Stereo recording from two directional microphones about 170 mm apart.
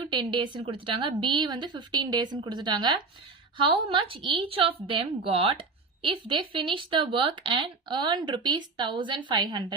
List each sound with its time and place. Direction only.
0.0 s a woman's voice: 30° right (ahead or behind)